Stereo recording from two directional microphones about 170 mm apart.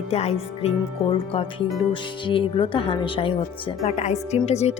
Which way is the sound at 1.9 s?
30° left (ahead or behind).